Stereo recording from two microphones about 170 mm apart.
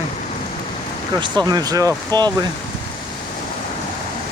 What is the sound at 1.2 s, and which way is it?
Speech, 25° right (ahead or behind).